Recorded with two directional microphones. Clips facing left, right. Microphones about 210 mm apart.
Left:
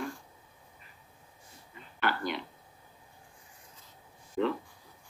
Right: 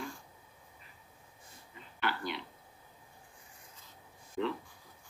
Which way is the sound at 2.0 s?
50° left (ahead or behind).